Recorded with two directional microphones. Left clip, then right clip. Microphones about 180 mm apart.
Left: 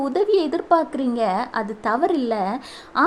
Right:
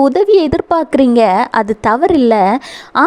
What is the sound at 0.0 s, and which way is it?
A woman's voice, 45° right (ahead or behind).